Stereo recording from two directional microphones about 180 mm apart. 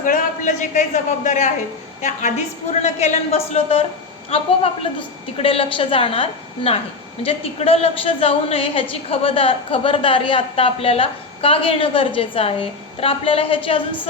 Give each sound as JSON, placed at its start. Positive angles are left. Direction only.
{"t": 0.0, "sound": "a man's voice", "side_deg": 45}